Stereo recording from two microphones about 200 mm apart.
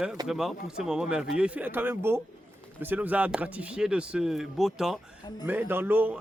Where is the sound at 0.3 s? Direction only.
Centre (ahead or behind).